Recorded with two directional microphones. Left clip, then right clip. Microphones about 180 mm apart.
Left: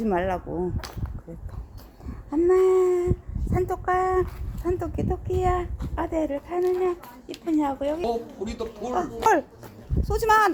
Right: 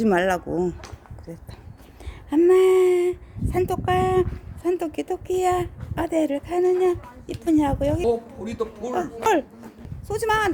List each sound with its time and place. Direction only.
0.0 s speech: 25° right (ahead or behind)
2.3 s a woman's voice: 20° right (ahead or behind)
9.0 s a woman's voice: 5° right (ahead or behind)